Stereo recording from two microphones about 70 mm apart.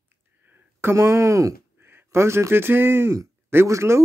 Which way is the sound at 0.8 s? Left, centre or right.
Right.